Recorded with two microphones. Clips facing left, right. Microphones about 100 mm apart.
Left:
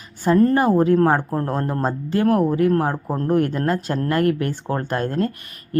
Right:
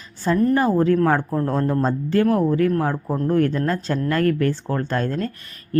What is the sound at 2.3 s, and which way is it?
Speech, 15° left (ahead or behind).